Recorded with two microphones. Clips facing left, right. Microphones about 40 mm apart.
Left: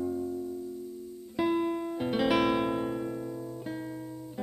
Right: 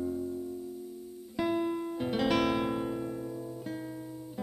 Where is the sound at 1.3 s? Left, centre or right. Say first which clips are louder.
Left 2 dB; centre.